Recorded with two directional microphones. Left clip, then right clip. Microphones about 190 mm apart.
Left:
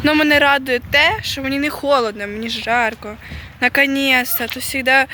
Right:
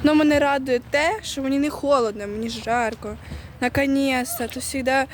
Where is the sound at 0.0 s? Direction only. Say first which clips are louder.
Left 5 dB; 10° right (ahead or behind).